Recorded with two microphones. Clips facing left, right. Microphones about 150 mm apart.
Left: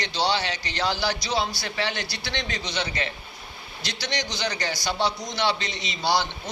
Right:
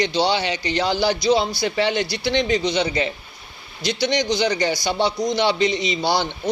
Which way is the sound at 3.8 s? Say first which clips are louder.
Right 11 dB; 15° right (ahead or behind).